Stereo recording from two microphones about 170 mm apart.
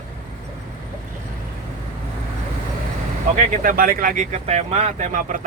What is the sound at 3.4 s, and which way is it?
Speech, 55° right (ahead or behind).